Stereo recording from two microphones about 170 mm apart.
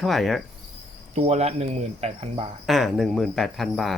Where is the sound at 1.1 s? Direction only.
40° right (ahead or behind).